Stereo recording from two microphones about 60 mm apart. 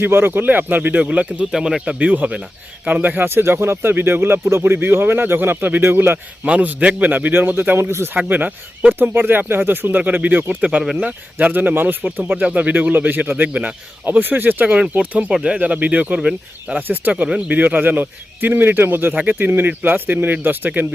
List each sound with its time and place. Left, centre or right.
0.0 s speech: right
1.5 s speech: centre
1.9 s speech: right
3.2 s speech: right
6.4 s speech: right
8.1 s speech: right
10.6 s speech: centre
16.8 s speech: right
19.1 s speech: right